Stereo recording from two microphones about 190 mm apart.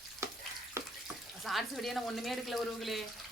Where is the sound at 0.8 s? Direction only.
15° right (ahead or behind).